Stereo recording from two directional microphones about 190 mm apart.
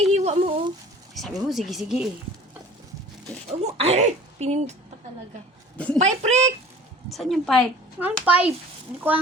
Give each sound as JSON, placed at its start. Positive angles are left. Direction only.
{"t": 0.1, "sound": "a sound", "side_deg": -35}
{"t": 1.1, "sound": "speech", "side_deg": 0}
{"t": 3.6, "sound": "speech", "side_deg": -35}
{"t": 5.7, "sound": "speech", "side_deg": 5}
{"t": 6.0, "sound": "speech", "side_deg": -35}
{"t": 7.1, "sound": "speech", "side_deg": 0}
{"t": 7.9, "sound": "a child's voice", "side_deg": -10}